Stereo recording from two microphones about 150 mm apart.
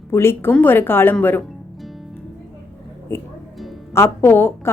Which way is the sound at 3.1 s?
15° left (ahead or behind).